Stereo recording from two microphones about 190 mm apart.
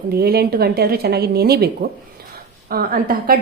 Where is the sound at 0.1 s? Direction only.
55° right (ahead or behind).